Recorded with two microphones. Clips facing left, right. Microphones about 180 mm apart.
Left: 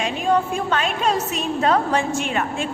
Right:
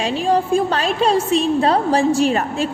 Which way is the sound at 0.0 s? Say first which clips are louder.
Right 2 dB; 30° right (ahead or behind).